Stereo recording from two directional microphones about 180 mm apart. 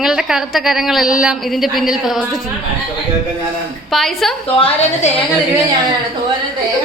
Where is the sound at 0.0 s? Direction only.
5° right (ahead or behind).